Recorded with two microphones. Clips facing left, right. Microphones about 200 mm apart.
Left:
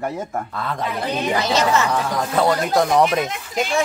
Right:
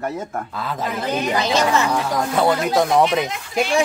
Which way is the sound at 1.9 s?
Centre (ahead or behind).